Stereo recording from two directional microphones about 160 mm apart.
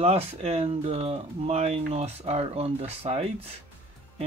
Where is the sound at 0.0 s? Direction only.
40° right (ahead or behind).